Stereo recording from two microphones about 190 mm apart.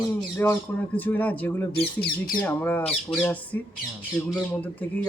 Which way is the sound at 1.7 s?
55° left (ahead or behind).